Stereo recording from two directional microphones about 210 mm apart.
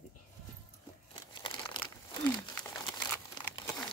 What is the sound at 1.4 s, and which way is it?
Crumpling, 20° left (ahead or behind).